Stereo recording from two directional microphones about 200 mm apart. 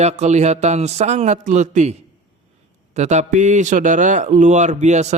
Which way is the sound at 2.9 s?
35° right (ahead or behind).